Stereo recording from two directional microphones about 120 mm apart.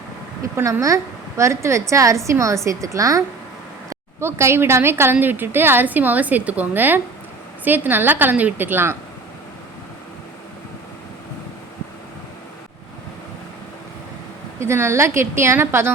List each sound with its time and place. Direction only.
0.5 s a woman's voice: 25° right (ahead or behind)
14.6 s a woman's voice: 20° right (ahead or behind)